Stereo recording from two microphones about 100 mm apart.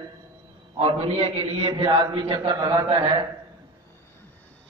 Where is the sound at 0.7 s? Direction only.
85° right.